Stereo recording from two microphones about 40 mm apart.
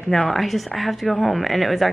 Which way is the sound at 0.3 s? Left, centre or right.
Centre.